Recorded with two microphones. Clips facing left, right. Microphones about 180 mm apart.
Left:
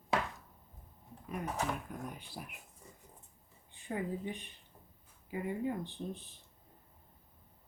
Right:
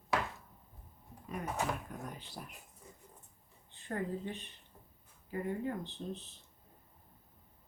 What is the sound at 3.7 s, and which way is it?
Speech, 15° left (ahead or behind).